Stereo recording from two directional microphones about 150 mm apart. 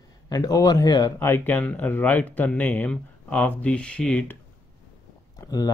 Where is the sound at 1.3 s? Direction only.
10° left (ahead or behind).